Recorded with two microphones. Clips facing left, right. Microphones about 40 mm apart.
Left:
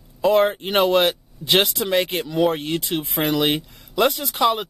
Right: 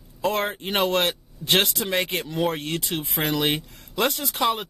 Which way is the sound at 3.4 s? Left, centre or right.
Centre.